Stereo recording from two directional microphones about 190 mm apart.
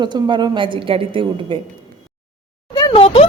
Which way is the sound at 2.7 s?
25° left (ahead or behind).